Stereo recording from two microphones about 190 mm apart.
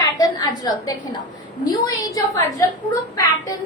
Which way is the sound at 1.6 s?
20° left (ahead or behind).